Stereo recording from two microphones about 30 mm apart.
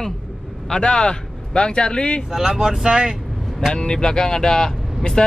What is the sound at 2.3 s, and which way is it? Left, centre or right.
Speech, centre.